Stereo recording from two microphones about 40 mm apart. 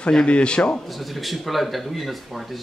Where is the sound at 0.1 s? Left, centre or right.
Left.